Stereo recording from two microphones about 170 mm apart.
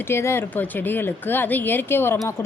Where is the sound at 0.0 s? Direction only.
15° left (ahead or behind).